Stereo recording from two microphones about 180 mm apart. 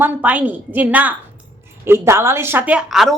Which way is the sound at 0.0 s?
10° right (ahead or behind).